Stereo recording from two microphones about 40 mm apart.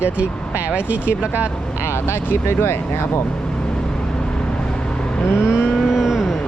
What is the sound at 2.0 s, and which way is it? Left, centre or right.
Speech, left.